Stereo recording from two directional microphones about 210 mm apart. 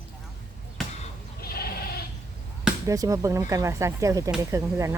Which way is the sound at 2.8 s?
15° right (ahead or behind).